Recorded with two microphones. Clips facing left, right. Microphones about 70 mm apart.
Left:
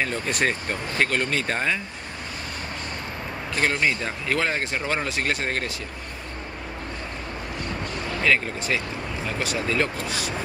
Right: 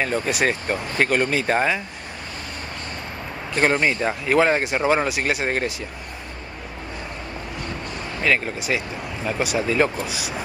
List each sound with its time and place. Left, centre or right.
0.0 s speech: centre
3.5 s speech: right
8.2 s speech: centre